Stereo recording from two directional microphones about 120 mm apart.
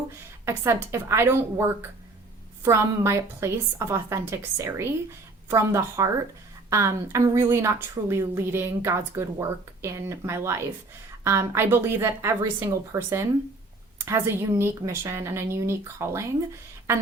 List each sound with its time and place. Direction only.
0.4 s a woman's voice: 20° right (ahead or behind)